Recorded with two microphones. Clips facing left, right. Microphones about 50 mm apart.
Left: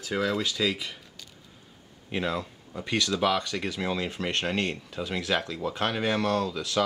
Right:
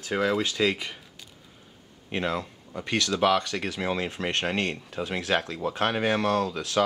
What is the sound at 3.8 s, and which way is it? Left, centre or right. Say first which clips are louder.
Speech: right 2 dB; right.